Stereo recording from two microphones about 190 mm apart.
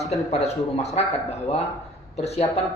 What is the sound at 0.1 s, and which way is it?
Speech, 35° left (ahead or behind).